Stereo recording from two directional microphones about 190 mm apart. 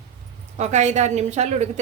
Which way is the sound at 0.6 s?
35° right (ahead or behind).